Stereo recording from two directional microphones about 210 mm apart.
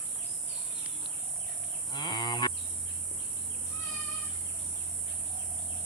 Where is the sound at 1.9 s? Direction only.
20° left (ahead or behind).